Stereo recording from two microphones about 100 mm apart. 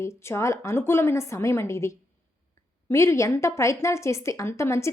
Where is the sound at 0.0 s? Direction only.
25° left (ahead or behind).